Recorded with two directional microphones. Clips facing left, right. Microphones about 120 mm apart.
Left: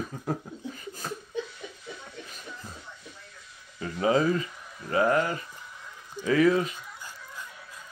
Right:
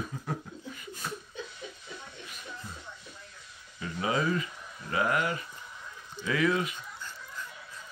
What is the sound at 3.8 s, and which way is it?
Speech, 35° left (ahead or behind).